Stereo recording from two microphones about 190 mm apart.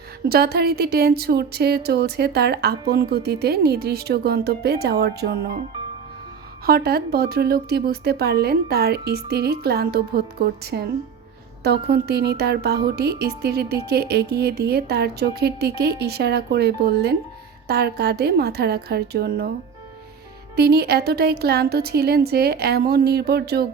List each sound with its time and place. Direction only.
0.3 s speech: 55° right (ahead or behind)
6.7 s speech: 55° right (ahead or behind)
20.6 s speech: 55° right (ahead or behind)